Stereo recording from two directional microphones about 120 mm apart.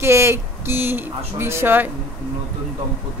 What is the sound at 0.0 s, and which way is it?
A woman's voice, 20° right (ahead or behind).